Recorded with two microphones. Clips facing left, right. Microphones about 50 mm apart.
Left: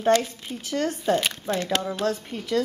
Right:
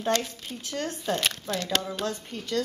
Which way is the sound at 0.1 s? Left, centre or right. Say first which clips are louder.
Left 7 dB; centre.